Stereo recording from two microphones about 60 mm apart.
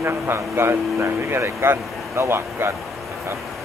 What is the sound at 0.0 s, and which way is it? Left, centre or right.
A man's voice, right.